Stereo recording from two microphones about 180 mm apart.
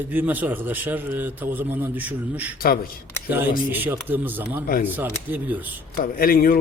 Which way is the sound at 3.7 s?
10° right (ahead or behind).